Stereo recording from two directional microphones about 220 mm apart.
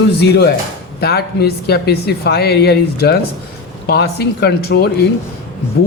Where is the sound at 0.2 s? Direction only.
45° left (ahead or behind).